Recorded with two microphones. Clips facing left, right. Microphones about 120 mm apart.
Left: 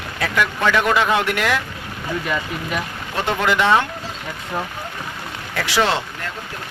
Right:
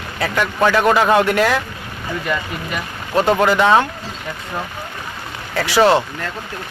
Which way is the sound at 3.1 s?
40° right (ahead or behind).